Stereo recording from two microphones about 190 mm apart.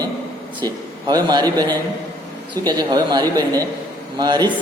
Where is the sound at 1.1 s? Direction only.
20° right (ahead or behind).